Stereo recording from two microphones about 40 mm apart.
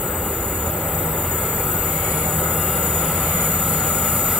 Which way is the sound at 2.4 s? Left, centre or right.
Centre.